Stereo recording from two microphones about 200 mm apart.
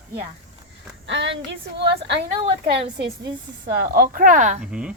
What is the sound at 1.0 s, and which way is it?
Speech, 65° right (ahead or behind).